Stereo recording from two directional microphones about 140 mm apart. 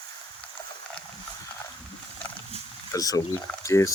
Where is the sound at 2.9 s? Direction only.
25° left (ahead or behind).